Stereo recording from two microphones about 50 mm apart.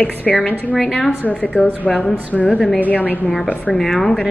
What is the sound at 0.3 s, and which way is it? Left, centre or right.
Speech, centre.